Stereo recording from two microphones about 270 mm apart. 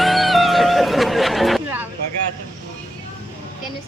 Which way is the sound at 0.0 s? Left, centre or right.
Centre.